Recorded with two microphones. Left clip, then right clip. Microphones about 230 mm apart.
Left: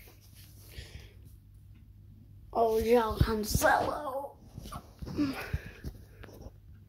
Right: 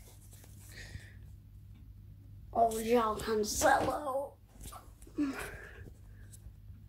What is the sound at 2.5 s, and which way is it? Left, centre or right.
Speech, centre.